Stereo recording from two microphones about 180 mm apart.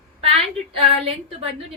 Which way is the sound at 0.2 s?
35° right (ahead or behind).